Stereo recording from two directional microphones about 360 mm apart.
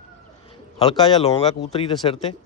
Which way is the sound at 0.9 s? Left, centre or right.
Centre.